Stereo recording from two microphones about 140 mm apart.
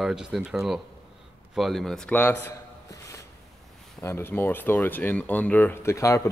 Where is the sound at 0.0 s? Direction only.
5° right (ahead or behind); by 2.4 s 15° left (ahead or behind).